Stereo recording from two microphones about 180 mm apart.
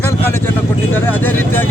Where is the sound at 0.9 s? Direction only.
10° left (ahead or behind).